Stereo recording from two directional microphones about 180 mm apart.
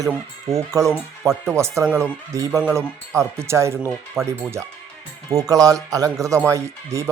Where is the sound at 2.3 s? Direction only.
15° right (ahead or behind).